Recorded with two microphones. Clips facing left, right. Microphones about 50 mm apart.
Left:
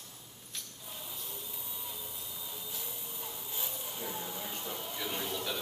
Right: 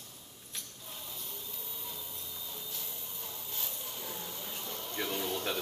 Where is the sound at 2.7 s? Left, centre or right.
Centre.